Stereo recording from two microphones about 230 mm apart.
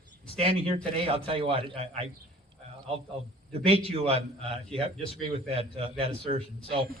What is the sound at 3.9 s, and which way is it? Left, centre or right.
A man's voice, right.